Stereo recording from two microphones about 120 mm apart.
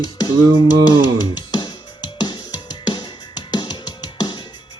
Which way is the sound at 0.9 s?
35° left (ahead or behind).